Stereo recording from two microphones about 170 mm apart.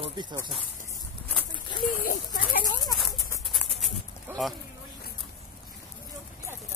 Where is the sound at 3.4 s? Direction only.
Centre (ahead or behind).